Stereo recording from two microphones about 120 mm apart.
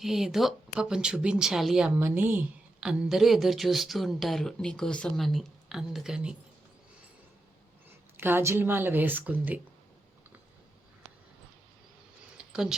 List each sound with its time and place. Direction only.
0.0 s speech: 5° right (ahead or behind)
2.0 s speech: 15° right (ahead or behind)
8.1 s speech: 20° right (ahead or behind)
12.4 s a sound: 5° right (ahead or behind)